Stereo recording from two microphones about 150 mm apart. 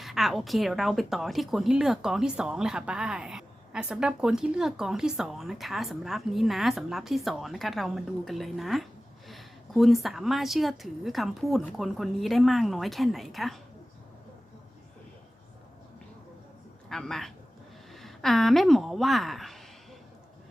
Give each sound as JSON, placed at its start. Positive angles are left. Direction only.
{"t": 0.0, "sound": "a woman's voice", "side_deg": 0}
{"t": 16.9, "sound": "a woman's voice", "side_deg": 5}